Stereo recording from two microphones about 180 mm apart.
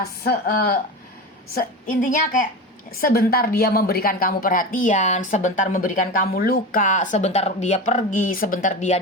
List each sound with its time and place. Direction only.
0.2 s a woman's voice: 55° left (ahead or behind); by 9.0 s 40° left (ahead or behind)